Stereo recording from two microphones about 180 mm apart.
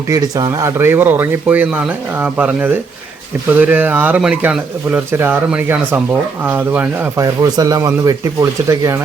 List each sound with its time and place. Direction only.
0.1 s speech: 20° right (ahead or behind)